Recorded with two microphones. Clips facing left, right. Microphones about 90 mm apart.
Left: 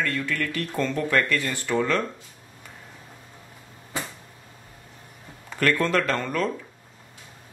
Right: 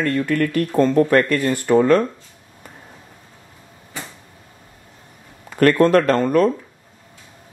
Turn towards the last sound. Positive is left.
turn(degrees=-45)  # may be behind; listen again after turning